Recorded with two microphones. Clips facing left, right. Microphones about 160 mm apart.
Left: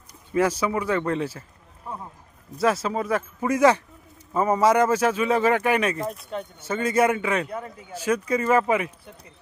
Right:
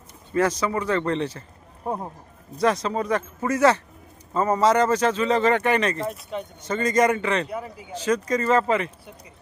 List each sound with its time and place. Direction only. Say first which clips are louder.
0.3 s speech: even; 10° left (ahead or behind)
1.8 s speech: right 7 dB; 50° right (ahead or behind)
2.6 s speech: right 1 dB; 5° left (ahead or behind)
7.5 s speech: right 1 dB; 5° right (ahead or behind)
7.9 s speech: right 1 dB; 10° left (ahead or behind)